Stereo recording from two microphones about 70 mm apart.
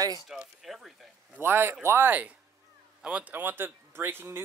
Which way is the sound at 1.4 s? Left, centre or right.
Right.